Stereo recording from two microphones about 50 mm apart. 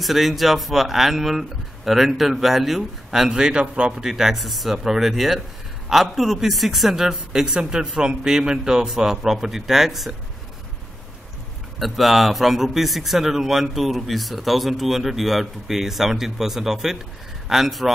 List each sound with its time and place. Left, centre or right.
0.0 s a man's voice: centre; by 4.1 s right
4.1 s a woman's voice: centre
11.8 s a man's voice: centre